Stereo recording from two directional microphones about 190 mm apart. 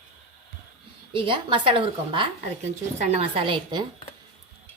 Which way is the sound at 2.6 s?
40° right (ahead or behind).